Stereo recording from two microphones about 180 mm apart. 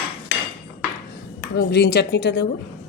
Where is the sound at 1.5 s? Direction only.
65° left (ahead or behind).